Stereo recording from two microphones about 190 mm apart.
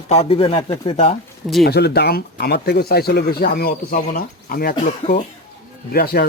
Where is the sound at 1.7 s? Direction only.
60° left (ahead or behind).